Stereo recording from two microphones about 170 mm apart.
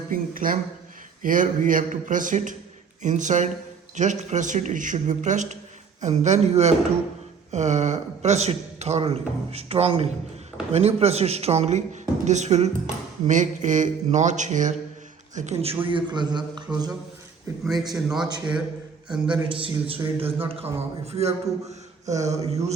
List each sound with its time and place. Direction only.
0.1 s a sound: 55° right (ahead or behind)
1.2 s a man's voice: 50° right (ahead or behind); by 16.9 s 25° right (ahead or behind)
17.9 s a man's voice: 5° right (ahead or behind)
19.5 s a man's voice: 30° right (ahead or behind)